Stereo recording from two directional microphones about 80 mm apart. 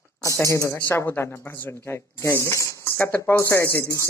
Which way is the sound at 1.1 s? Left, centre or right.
Left.